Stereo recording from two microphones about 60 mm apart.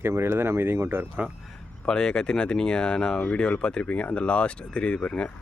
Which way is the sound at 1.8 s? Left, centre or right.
Centre.